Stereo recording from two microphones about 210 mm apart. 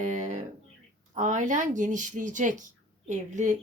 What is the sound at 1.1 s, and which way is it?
A woman's voice, 35° right (ahead or behind).